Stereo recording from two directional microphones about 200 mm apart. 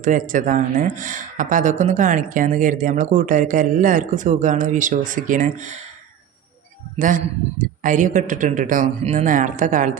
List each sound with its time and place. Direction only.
0.0 s speech: 40° right (ahead or behind)
6.9 s a man's voice: 40° right (ahead or behind)